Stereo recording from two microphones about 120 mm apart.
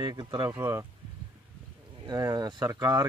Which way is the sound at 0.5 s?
20° right (ahead or behind).